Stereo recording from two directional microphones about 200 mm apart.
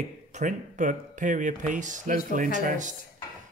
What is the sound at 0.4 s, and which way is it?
Speech, 40° right (ahead or behind).